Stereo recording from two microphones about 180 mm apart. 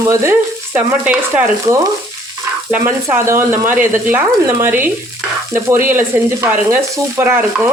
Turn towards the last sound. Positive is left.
turn(degrees=-15)  # may be behind; listen again after turning